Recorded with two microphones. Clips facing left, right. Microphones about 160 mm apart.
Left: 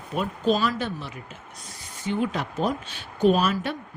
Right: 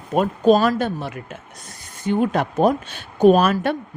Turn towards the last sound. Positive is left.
turn(degrees=-55)  # may be behind; listen again after turning